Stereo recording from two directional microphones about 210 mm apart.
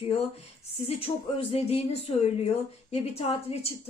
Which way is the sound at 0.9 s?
30° left (ahead or behind).